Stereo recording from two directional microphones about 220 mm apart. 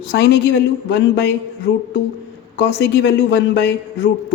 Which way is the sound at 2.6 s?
50° left (ahead or behind).